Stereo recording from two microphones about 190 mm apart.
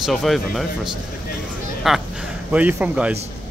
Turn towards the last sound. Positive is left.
turn(degrees=-5)  # may be behind; listen again after turning